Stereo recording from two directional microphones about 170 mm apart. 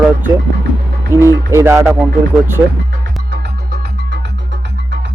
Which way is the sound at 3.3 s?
75° right (ahead or behind).